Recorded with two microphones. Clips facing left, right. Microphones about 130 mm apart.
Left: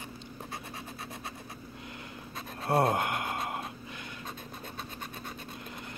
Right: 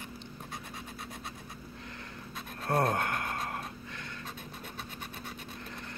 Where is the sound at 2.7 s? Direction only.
20° left (ahead or behind).